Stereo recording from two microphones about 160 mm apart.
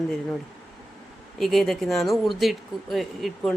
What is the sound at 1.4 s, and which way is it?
Speech, centre (ahead or behind).